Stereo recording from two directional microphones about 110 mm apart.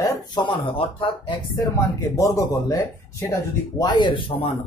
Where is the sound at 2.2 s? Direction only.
30° left (ahead or behind).